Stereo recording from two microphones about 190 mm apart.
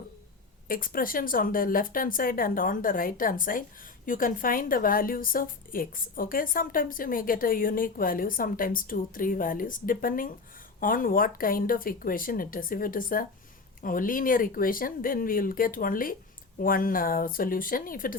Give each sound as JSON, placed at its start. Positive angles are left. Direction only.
{"t": 0.7, "sound": "a woman's voice", "side_deg": 45}